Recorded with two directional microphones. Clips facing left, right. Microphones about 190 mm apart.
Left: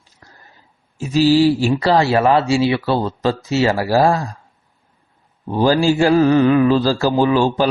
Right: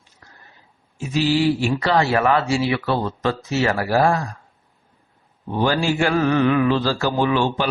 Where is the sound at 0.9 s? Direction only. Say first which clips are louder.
Left 6 dB; 35° left (ahead or behind).